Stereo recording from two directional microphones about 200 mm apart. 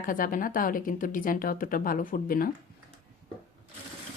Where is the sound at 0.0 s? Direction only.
45° left (ahead or behind).